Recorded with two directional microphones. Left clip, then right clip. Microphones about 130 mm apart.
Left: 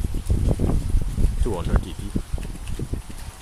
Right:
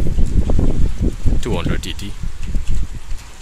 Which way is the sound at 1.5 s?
15° right (ahead or behind).